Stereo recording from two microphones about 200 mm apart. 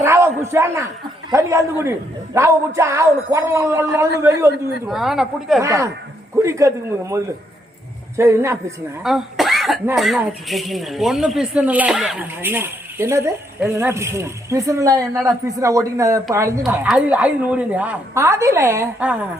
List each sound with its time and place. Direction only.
0.0 s a sound: 15° right (ahead or behind)
1.3 s speech: 15° right (ahead or behind)
4.9 s speech: centre (ahead or behind)
5.6 s speech: 15° right (ahead or behind)
9.0 s cough: centre (ahead or behind)
9.9 s speech: centre (ahead or behind)